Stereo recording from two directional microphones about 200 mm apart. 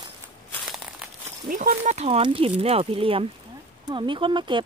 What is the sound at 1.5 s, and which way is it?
Speech, 40° right (ahead or behind).